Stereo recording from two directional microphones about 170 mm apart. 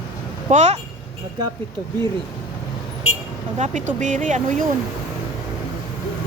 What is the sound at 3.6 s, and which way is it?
Speech, 45° right (ahead or behind).